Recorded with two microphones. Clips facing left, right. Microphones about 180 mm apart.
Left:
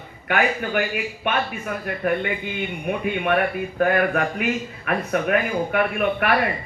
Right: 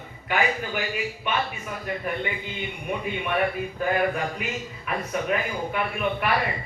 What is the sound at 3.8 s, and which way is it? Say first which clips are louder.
A man's voice: left 5 dB; 60° left (ahead or behind).